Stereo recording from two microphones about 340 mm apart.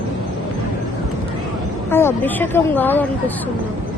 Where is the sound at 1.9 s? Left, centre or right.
Centre.